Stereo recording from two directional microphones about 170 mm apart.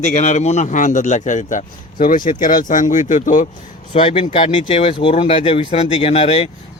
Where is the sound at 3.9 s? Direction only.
35° left (ahead or behind).